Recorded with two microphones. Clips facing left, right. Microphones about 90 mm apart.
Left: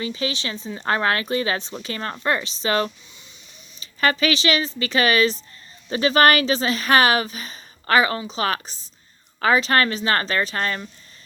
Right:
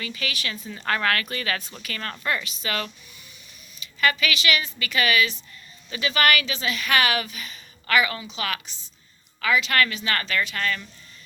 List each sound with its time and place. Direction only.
0.0 s speech: 25° left (ahead or behind)